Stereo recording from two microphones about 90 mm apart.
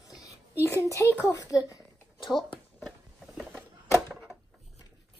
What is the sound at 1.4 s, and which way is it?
Speech, 40° left (ahead or behind).